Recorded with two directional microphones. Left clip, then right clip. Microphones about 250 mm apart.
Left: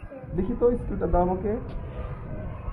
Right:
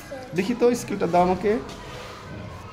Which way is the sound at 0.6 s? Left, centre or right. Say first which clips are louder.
Right 2 dB; right.